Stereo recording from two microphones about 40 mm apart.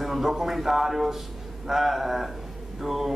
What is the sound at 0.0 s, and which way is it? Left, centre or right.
A man's voice, centre.